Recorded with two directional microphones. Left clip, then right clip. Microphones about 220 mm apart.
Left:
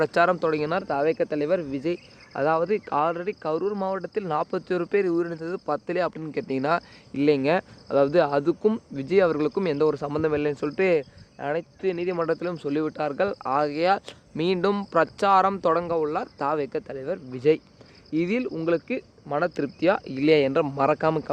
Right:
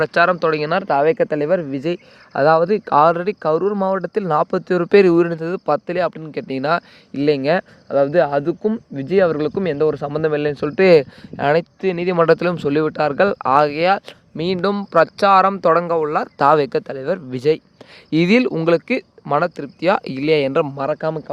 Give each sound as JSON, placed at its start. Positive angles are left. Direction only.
{"t": 0.0, "sound": "speech", "side_deg": -15}
{"t": 19.5, "sound": "speech", "side_deg": -10}
{"t": 19.8, "sound": "speech", "side_deg": -25}
{"t": 20.7, "sound": "speech", "side_deg": -5}